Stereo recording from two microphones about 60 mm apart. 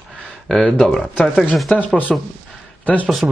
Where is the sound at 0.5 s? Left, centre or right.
Centre.